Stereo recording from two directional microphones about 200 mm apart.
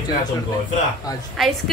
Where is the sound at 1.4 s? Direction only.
Centre (ahead or behind).